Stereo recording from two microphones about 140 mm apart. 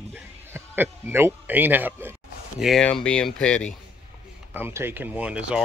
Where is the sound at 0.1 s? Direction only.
15° right (ahead or behind).